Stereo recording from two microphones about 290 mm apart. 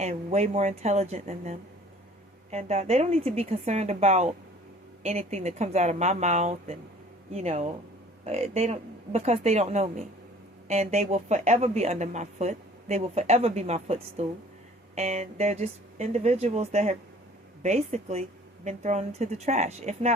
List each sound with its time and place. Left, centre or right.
0.0 s a woman's voice: right